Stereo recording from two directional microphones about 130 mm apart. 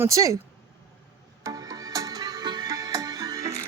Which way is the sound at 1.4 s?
25° right (ahead or behind).